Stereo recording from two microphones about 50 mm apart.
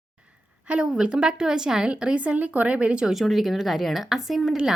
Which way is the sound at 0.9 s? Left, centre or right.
Centre.